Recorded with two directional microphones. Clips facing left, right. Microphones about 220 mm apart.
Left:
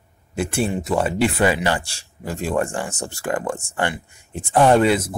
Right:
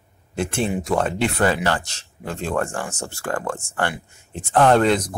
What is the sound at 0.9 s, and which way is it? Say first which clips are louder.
Speech: left 2 dB; 5° left (ahead or behind).